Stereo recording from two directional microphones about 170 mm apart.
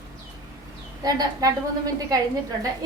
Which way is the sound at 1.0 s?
20° right (ahead or behind).